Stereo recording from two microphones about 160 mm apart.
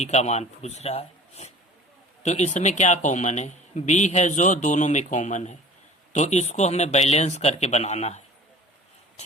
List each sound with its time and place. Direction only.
0.0 s speech: 45° left (ahead or behind)